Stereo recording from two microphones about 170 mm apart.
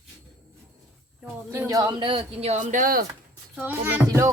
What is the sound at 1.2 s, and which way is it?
A woman's voice, 15° right (ahead or behind).